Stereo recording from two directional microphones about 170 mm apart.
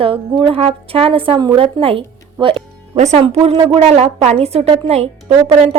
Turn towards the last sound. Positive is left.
turn(degrees=-35)  # may be behind; listen again after turning